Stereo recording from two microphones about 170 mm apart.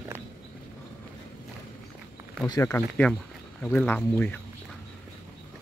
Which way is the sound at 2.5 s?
10° left (ahead or behind).